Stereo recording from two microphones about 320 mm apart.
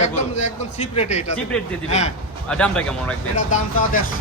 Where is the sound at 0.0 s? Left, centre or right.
Left.